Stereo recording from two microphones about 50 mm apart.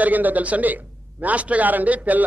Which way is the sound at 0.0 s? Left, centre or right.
Right.